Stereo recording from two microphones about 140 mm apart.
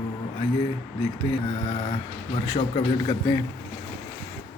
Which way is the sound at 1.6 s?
40° left (ahead or behind).